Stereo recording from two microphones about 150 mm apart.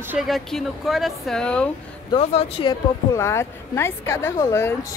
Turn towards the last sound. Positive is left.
turn(degrees=20)  # may be behind; listen again after turning